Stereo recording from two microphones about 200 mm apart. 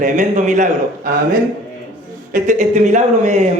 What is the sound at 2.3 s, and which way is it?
Speech, 40° right (ahead or behind).